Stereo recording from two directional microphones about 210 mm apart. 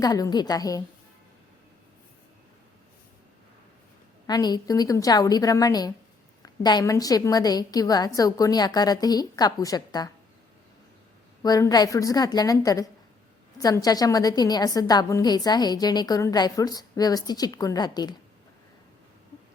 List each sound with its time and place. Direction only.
0.0 s a woman's voice: 20° left (ahead or behind)
4.3 s a woman's voice: 20° left (ahead or behind)
11.4 s a woman's voice: 15° left (ahead or behind)